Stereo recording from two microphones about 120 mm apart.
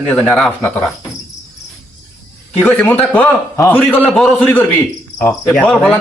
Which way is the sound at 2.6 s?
15° left (ahead or behind).